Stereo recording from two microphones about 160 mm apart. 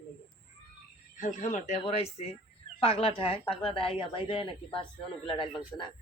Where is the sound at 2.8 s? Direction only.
35° left (ahead or behind).